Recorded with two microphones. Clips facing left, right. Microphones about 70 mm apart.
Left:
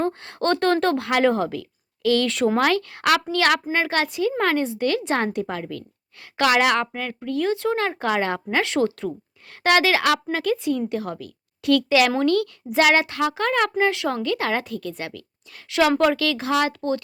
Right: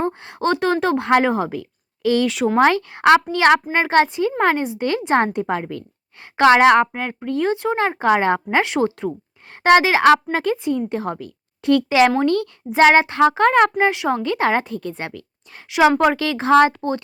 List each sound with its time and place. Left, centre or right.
0.0 s speech: centre
0.9 s a woman's voice: right
2.2 s speech: centre
2.6 s speech: right
13.7 s speech: right